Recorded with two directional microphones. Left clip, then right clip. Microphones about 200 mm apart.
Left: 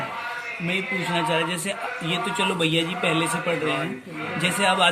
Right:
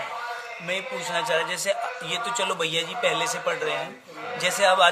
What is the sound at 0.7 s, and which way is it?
A man's voice, 40° right (ahead or behind).